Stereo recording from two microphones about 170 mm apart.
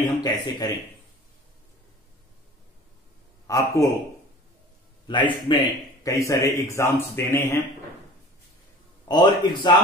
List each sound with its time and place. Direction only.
0.2 s a man's voice: 25° left (ahead or behind)
3.4 s a man's voice: 20° left (ahead or behind)
5.0 s a man's voice: 25° left (ahead or behind)
9.0 s a man's voice: 25° left (ahead or behind)